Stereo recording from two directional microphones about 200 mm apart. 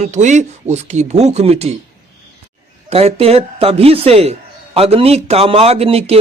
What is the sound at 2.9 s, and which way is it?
A man's voice, 30° right (ahead or behind).